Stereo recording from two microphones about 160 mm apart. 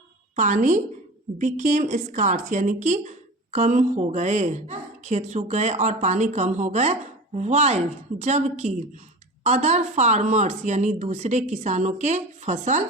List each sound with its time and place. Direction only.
0.3 s speech: 50° right (ahead or behind)